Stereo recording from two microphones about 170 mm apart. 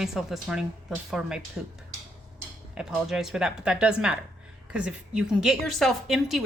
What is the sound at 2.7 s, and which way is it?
A woman's voice, centre (ahead or behind).